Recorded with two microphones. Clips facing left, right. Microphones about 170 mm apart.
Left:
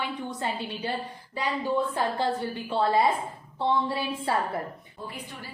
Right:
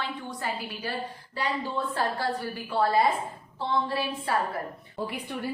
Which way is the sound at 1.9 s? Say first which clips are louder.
Left 2 dB; 20° left (ahead or behind).